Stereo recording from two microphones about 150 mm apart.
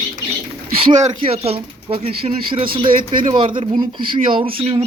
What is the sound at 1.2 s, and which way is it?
Speech, 40° right (ahead or behind).